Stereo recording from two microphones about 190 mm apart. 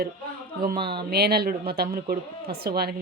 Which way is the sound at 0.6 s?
55° right (ahead or behind).